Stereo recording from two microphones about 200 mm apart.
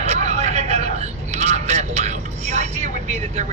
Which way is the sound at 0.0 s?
35° right (ahead or behind).